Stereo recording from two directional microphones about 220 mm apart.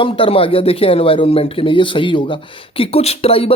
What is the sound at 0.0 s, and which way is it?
Speech, 25° left (ahead or behind).